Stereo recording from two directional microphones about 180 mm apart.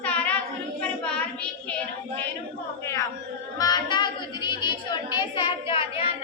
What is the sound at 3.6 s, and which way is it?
Speech, 20° left (ahead or behind).